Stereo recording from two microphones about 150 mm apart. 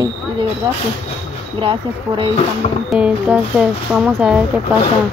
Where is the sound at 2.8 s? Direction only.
5° right (ahead or behind).